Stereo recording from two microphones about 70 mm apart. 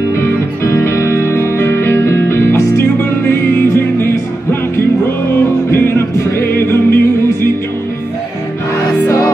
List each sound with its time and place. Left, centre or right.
0.2 s music: left